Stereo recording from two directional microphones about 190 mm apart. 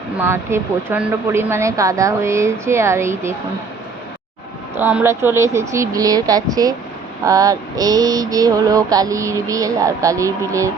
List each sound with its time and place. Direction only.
0.2 s speech: 10° right (ahead or behind)
4.8 s speech: 10° right (ahead or behind)
7.3 s mantra: 20° right (ahead or behind)